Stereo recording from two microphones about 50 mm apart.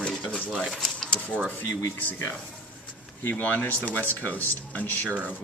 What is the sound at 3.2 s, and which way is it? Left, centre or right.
Speech, left.